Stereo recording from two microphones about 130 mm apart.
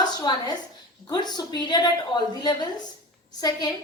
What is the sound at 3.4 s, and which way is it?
Speech, 30° left (ahead or behind).